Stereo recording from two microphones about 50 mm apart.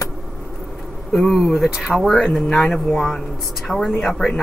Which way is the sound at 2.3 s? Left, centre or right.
Centre.